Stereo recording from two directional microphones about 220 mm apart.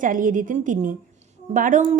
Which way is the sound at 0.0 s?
35° right (ahead or behind).